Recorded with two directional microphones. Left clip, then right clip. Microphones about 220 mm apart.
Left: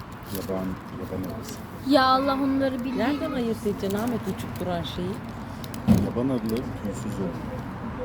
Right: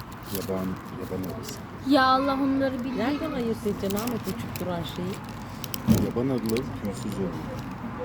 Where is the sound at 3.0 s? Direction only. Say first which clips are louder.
Left 2 dB; 35° left (ahead or behind).